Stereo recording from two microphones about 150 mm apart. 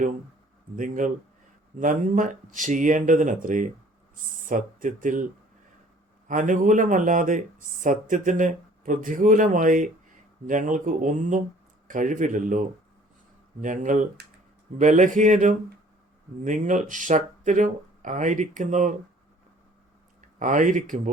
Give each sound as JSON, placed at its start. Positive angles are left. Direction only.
{"t": 0.8, "sound": "speech", "side_deg": -60}
{"t": 6.2, "sound": "speech", "side_deg": -60}
{"t": 20.4, "sound": "speech", "side_deg": -60}